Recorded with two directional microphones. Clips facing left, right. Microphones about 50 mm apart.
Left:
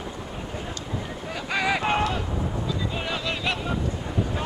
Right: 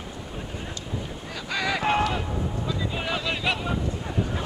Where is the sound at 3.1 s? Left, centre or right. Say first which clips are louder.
Right 2 dB; centre.